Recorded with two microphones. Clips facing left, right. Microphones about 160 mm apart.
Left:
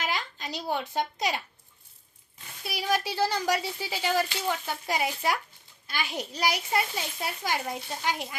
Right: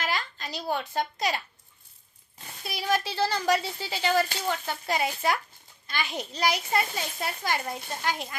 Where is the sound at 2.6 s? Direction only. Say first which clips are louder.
Even; 10° left (ahead or behind).